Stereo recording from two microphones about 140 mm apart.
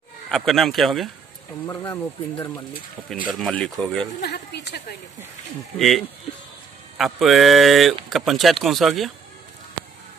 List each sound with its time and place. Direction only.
0.3 s speech: centre (ahead or behind)
1.7 s speech: 20° left (ahead or behind)
3.0 s speech: centre (ahead or behind)
5.8 s speech: centre (ahead or behind)
7.2 s speech: centre (ahead or behind)